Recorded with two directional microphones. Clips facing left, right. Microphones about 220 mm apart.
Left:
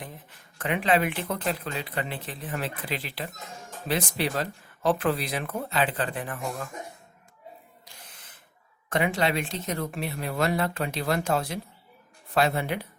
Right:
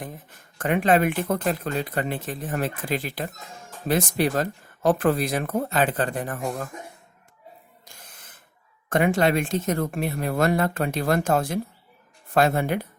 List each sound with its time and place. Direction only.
0.0 s speech: 45° right (ahead or behind)
7.9 s a sound: 45° right (ahead or behind)
8.9 s speech: 50° right (ahead or behind)